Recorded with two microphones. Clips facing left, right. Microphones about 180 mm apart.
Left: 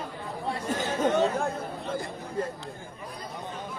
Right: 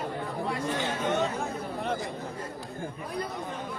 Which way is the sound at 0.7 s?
45° left (ahead or behind).